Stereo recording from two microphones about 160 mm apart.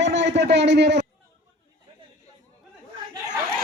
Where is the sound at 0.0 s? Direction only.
90° right.